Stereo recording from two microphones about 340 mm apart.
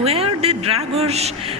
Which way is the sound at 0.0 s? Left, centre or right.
Centre.